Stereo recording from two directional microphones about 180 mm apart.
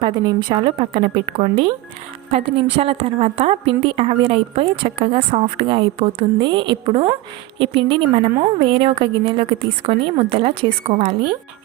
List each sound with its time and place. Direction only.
0.0 s a woman's voice: 25° right (ahead or behind)